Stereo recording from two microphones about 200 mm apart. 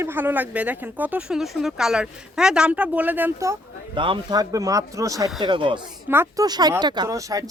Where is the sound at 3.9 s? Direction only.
25° right (ahead or behind).